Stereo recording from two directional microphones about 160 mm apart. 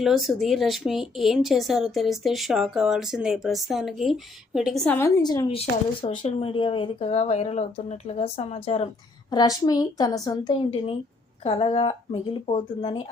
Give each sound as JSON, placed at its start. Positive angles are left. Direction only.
{"t": 0.0, "sound": "speech", "side_deg": 0}
{"t": 4.9, "sound": "a woman's voice", "side_deg": 20}
{"t": 6.1, "sound": "speech", "side_deg": 50}
{"t": 6.4, "sound": "speech", "side_deg": 30}
{"t": 9.3, "sound": "a woman's voice", "side_deg": 25}